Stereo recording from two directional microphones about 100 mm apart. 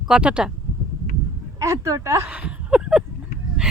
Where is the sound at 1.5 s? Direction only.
30° right (ahead or behind).